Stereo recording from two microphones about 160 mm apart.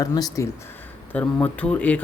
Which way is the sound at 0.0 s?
25° left (ahead or behind).